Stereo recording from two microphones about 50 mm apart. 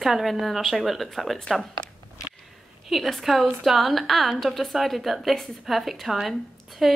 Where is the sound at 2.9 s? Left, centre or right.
Centre.